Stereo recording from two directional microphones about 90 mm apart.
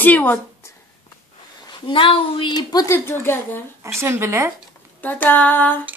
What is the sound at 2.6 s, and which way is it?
Speech, 45° left (ahead or behind).